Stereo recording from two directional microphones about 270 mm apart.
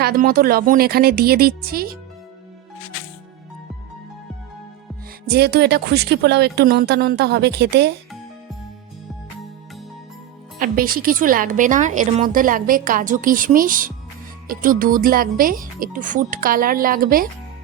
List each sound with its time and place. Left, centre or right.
0.0 s a woman's voice: right
5.2 s a woman's voice: right
10.6 s a woman's voice: right